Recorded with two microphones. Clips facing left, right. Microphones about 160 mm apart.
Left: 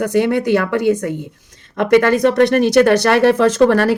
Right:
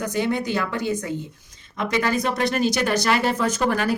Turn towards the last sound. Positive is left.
turn(degrees=80)